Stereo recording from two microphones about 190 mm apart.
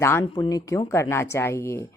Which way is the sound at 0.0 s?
15° left (ahead or behind).